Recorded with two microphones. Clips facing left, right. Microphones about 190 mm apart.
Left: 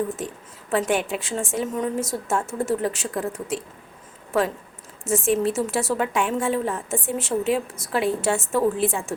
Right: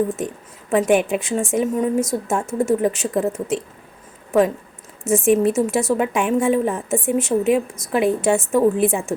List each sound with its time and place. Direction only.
0.7 s a woman's voice: 15° right (ahead or behind)